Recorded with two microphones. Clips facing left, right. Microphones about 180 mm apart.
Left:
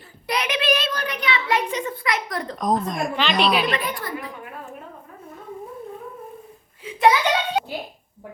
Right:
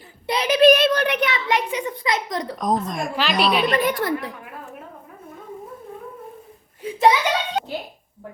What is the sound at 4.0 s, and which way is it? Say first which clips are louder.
Speech: right 7 dB; 80° right.